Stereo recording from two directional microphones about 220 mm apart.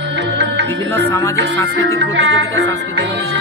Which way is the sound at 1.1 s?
10° left (ahead or behind).